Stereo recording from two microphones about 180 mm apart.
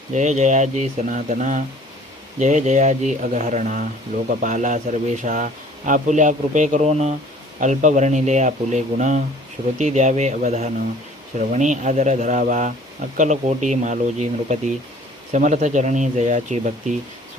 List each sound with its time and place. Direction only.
0.1 s a man's voice: 40° right (ahead or behind)